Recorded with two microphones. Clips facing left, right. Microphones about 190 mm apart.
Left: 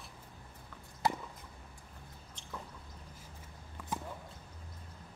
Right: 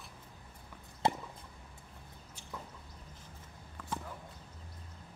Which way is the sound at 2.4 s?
10° right (ahead or behind).